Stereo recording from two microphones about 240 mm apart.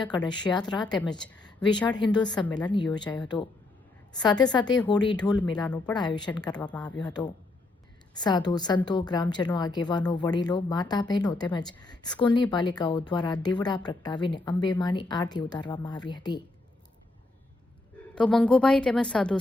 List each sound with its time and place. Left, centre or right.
0.0 s a woman's voice: centre
18.1 s a woman's voice: centre